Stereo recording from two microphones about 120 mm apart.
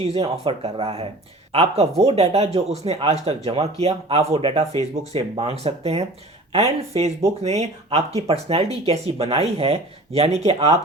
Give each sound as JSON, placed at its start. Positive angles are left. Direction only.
{"t": 0.0, "sound": "speech", "side_deg": -55}